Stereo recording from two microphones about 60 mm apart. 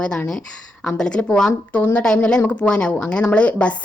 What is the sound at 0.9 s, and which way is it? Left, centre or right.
Speech, centre.